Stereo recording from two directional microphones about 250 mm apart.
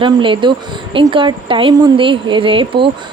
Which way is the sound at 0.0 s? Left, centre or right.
Centre.